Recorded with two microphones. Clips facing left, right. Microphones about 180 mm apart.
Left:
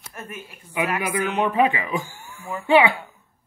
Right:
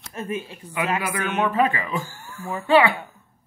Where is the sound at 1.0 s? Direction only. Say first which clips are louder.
Left 1 dB; 15° left (ahead or behind).